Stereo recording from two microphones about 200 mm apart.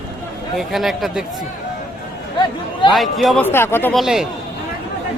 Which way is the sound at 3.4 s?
10° left (ahead or behind).